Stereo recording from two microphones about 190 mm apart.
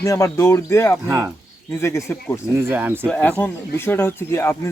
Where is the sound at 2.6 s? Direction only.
10° right (ahead or behind).